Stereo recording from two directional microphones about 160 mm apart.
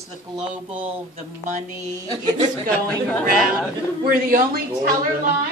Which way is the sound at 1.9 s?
25° right (ahead or behind).